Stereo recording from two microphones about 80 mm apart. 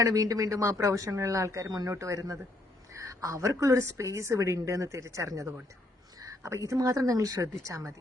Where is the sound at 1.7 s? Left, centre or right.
Right.